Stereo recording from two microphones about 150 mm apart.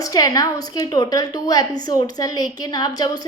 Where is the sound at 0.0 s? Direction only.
25° left (ahead or behind).